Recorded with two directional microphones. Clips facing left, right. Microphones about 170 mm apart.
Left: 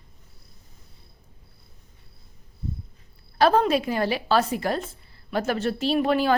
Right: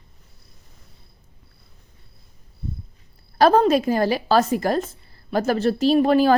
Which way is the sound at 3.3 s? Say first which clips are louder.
Right 4 dB; 40° right (ahead or behind).